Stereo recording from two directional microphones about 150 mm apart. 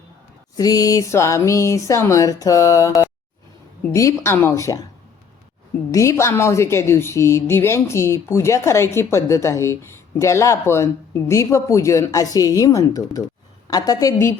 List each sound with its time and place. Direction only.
0.5 s speech: 25° left (ahead or behind)
5.9 s speech: 20° left (ahead or behind)